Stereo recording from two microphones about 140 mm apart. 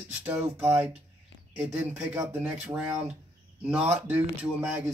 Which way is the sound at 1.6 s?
10° right (ahead or behind).